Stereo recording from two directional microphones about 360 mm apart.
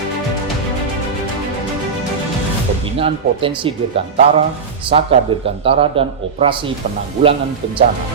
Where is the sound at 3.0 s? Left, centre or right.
Centre.